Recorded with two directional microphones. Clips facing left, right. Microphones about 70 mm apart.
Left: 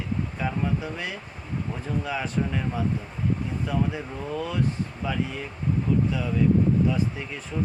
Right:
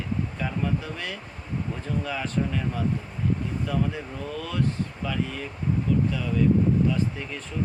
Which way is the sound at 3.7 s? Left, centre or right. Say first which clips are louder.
Left 1 dB; centre.